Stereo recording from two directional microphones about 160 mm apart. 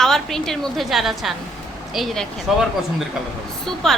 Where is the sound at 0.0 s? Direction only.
5° left (ahead or behind).